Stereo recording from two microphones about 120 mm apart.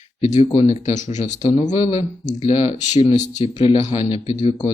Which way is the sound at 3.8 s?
60° left (ahead or behind).